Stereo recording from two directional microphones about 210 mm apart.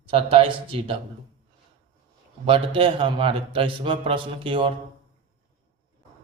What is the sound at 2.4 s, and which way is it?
A man's voice, 25° right (ahead or behind).